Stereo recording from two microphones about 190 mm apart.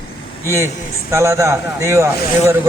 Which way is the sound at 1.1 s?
15° right (ahead or behind).